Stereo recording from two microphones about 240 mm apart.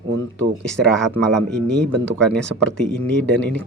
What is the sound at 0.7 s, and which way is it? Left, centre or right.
Speech, centre.